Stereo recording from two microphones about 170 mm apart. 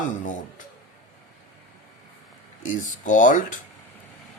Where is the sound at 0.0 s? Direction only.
50° left (ahead or behind).